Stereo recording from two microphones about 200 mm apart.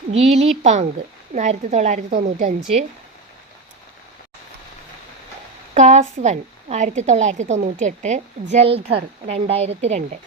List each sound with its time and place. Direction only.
0.1 s a woman's voice: 30° right (ahead or behind)
5.7 s a woman's voice: 35° right (ahead or behind)